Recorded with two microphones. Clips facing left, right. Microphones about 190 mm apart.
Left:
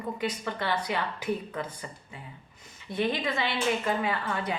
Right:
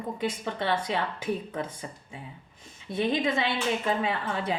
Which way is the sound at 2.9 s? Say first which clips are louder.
Right 3 dB; 25° right (ahead or behind).